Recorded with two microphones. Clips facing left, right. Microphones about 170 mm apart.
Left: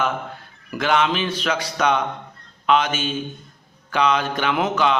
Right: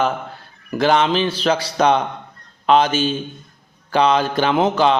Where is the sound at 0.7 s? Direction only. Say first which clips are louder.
Right 4 dB; 30° right (ahead or behind).